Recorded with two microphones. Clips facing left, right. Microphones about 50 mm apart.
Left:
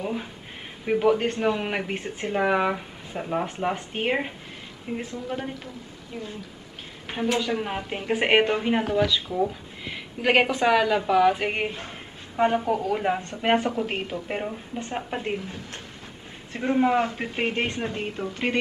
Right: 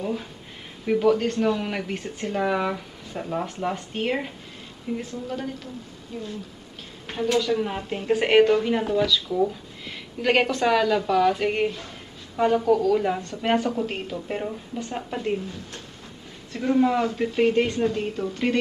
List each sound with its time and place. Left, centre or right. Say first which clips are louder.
0.0 s speech: right 1 dB; left
7.1 s speech: right 2 dB; left
9.3 s speech: right 2 dB; centre
15.3 s speech: right 2 dB; left